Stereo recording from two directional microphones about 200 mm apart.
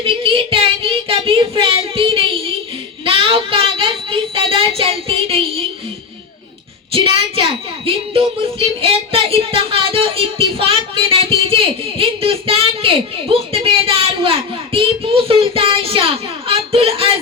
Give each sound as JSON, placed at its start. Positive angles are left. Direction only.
{"t": 0.0, "sound": "child singing", "side_deg": -25}
{"t": 3.0, "sound": "speech", "side_deg": -25}
{"t": 6.9, "sound": "speech", "side_deg": -25}